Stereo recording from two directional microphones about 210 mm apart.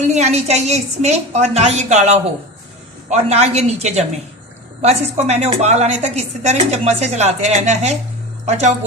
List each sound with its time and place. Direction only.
0.1 s a woman's voice: 30° right (ahead or behind)